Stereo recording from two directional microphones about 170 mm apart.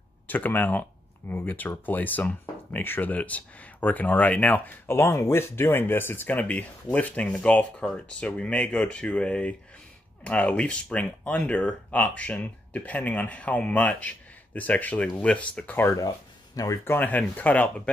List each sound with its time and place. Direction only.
0.3 s speech: 10° left (ahead or behind)